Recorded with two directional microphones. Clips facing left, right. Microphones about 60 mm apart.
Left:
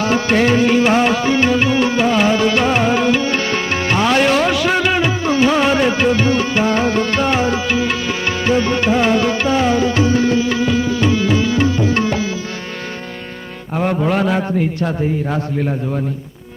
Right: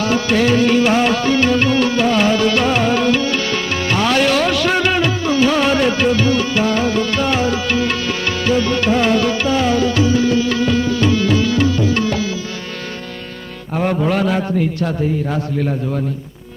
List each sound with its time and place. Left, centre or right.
0.0 s music: left; by 5.1 s centre
5.2 s music: left
7.7 s music: centre; by 10.3 s left
10.3 s music: left
13.7 s mantra: centre
14.2 s music: left